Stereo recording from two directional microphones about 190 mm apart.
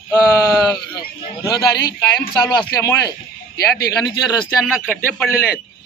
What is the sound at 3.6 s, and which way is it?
Speech, 55° left (ahead or behind).